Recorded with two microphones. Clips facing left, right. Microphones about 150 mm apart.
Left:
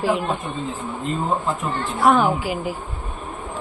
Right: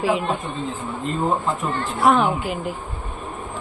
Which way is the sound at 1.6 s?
Centre (ahead or behind).